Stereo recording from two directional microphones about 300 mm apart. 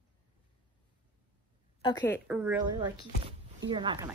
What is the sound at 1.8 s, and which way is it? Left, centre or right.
Speech, centre.